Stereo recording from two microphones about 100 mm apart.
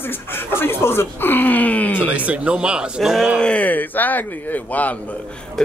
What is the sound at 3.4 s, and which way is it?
A man's voice, 10° left (ahead or behind).